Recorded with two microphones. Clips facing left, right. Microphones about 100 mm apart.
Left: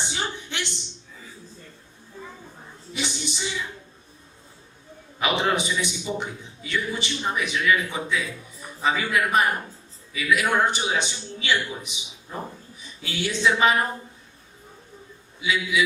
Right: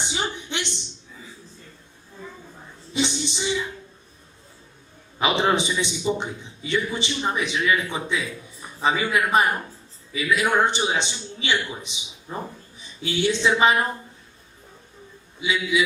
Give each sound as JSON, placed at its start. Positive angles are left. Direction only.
{"t": 0.0, "sound": "a sound", "side_deg": -15}
{"t": 2.9, "sound": "music", "side_deg": -25}
{"t": 5.2, "sound": "a man's voice", "side_deg": -25}
{"t": 15.4, "sound": "a man's voice", "side_deg": -25}